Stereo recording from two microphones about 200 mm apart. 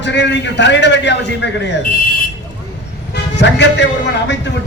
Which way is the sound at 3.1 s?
60° left (ahead or behind).